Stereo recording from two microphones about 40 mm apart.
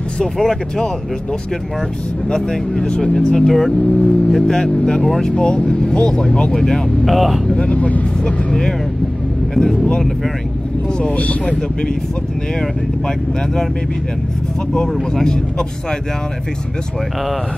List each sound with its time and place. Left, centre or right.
0.2 s speech: centre
2.2 s speech: centre
7.1 s speech: centre
7.4 s speech: left
11.0 s speech: left